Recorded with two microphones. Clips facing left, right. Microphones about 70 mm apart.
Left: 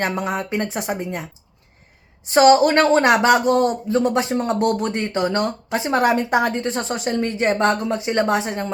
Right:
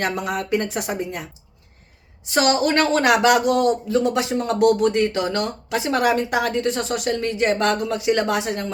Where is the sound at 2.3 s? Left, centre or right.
Left.